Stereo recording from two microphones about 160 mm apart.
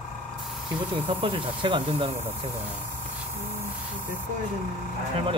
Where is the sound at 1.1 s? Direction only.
35° right (ahead or behind).